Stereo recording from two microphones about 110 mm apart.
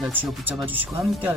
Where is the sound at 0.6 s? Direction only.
15° right (ahead or behind).